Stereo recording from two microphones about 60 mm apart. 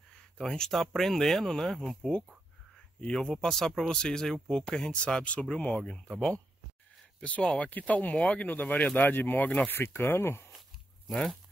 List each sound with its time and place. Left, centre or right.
0.1 s speech: centre
5.8 s speech: centre
7.2 s speech: left
9.8 s speech: left
11.1 s speech: centre